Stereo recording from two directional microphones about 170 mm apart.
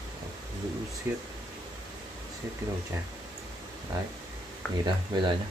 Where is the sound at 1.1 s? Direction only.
15° right (ahead or behind).